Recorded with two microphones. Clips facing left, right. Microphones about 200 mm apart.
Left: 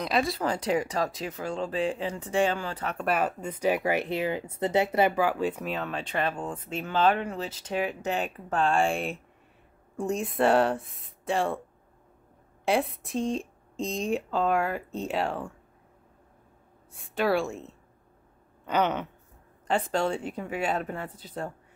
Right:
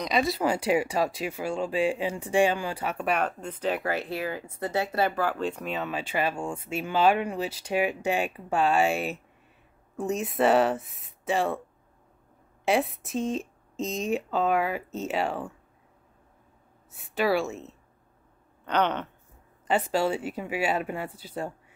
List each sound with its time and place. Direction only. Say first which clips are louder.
0.0 s speech: right 1 dB; centre (ahead or behind)
0.4 s speech: right 2 dB; 10° right (ahead or behind)
12.6 s speech: right 1 dB; centre (ahead or behind)
16.9 s speech: right 1 dB; 5° right (ahead or behind)
19.7 s speech: right 1 dB; 5° right (ahead or behind)